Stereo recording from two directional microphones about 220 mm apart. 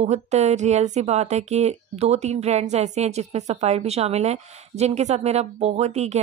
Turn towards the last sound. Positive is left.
turn(degrees=-30)  # may be behind; listen again after turning